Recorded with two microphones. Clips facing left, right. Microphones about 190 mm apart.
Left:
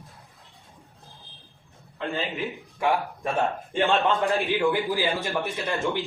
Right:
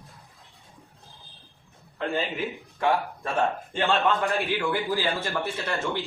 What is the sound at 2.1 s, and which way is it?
Speech, centre (ahead or behind).